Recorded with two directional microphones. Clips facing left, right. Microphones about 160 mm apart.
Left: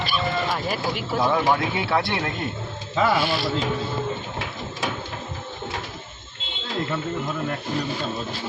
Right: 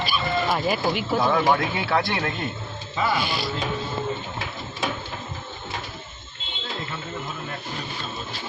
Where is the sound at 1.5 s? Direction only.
25° left (ahead or behind).